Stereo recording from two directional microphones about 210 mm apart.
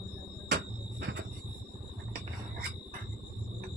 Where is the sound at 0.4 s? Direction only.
55° right (ahead or behind).